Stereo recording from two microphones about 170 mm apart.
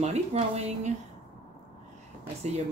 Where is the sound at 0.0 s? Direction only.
40° right (ahead or behind).